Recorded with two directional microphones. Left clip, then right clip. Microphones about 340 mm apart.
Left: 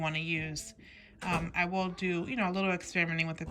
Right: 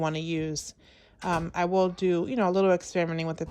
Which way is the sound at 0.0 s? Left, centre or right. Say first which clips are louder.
Right 4 dB; centre.